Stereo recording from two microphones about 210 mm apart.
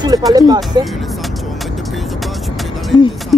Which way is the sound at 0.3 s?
20° right (ahead or behind).